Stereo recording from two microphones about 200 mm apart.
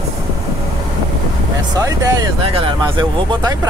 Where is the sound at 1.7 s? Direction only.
20° right (ahead or behind).